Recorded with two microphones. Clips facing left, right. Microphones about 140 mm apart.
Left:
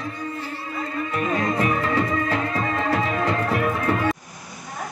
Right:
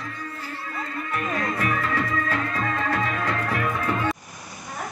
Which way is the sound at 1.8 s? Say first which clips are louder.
Left 3 dB; 15° left (ahead or behind).